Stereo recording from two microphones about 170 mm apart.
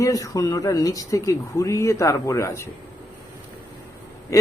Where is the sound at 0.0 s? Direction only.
20° left (ahead or behind).